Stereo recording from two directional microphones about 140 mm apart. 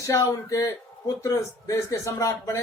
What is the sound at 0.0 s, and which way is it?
Speech, 25° left (ahead or behind).